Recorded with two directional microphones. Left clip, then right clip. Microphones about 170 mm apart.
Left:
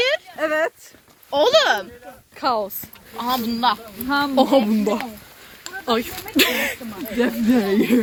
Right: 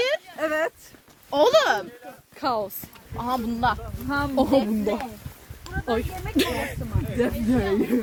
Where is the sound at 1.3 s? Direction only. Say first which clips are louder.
Left 2 dB; 80° right.